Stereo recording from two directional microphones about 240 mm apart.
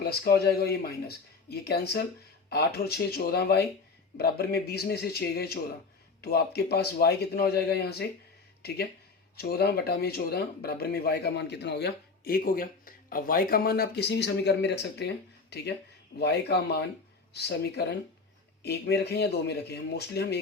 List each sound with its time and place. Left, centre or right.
0.0 s speech: left
9.3 s speech: left